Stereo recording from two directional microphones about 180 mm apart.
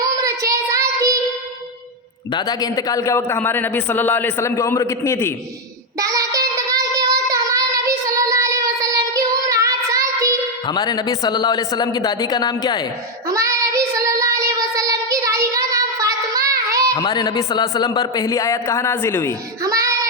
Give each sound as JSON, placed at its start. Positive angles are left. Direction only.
{"t": 0.0, "sound": "child singing", "side_deg": -20}
{"t": 2.3, "sound": "a man's voice", "side_deg": 20}
{"t": 6.0, "sound": "child singing", "side_deg": -20}
{"t": 10.7, "sound": "speech", "side_deg": 20}
{"t": 13.2, "sound": "child singing", "side_deg": -15}
{"t": 16.9, "sound": "speech", "side_deg": 25}
{"t": 19.6, "sound": "child singing", "side_deg": -20}